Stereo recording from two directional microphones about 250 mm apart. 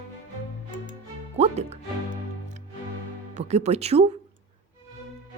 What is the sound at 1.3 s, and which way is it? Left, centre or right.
Music, right.